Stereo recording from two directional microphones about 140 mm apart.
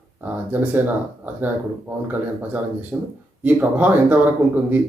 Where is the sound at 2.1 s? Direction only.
10° right (ahead or behind).